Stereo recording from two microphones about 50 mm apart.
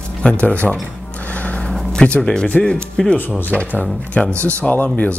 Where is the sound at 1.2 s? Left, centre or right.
Left.